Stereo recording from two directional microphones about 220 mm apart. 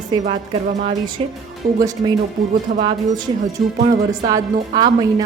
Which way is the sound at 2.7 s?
40° right (ahead or behind).